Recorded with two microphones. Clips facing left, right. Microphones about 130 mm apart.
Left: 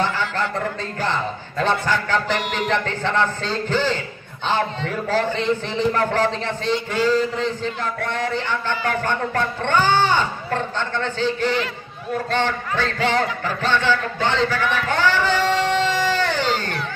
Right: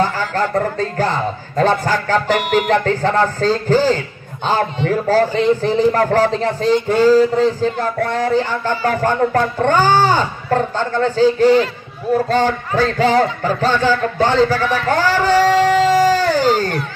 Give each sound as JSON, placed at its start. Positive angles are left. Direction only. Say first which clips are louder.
{"t": 0.0, "sound": "a man's voice", "louder": "right 5 dB", "side_deg": -40}